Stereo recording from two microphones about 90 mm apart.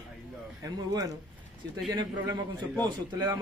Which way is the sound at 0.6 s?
40° right (ahead or behind).